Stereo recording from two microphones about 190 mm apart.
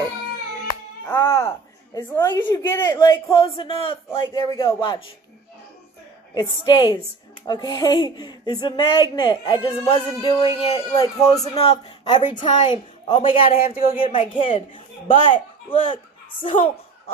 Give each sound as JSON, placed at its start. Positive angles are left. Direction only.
{"t": 1.0, "sound": "music", "side_deg": 15}
{"t": 2.0, "sound": "speech", "side_deg": 15}
{"t": 6.3, "sound": "speech", "side_deg": 25}
{"t": 10.9, "sound": "a man's voice", "side_deg": 20}
{"t": 13.6, "sound": "speech", "side_deg": 50}
{"t": 14.1, "sound": "speech", "side_deg": 25}